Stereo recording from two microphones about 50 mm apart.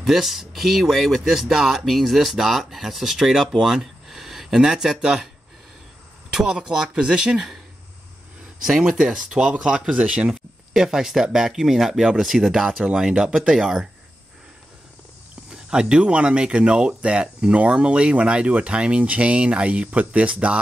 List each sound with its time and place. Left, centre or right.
0.0 s speech: centre
6.3 s speech: centre
8.6 s speech: centre
15.5 s speech: centre